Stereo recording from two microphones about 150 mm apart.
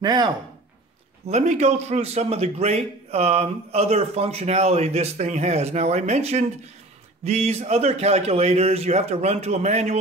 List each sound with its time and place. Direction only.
0.0 s speech: 25° right (ahead or behind)
1.2 s a man's voice: 50° right (ahead or behind)